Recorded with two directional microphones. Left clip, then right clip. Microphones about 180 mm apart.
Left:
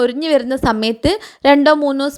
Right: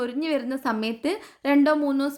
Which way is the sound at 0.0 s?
35° left (ahead or behind).